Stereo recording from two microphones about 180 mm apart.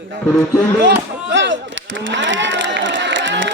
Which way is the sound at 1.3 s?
90° right.